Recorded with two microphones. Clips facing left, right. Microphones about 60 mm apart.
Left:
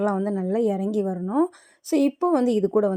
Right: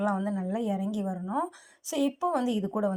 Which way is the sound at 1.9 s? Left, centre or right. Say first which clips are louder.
Left 7 dB; left.